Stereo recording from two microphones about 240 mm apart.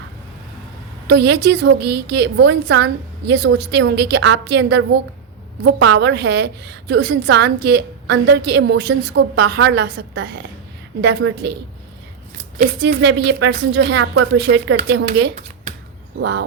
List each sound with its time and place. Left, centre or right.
1.0 s a woman's voice: right
12.8 s a woman's voice: right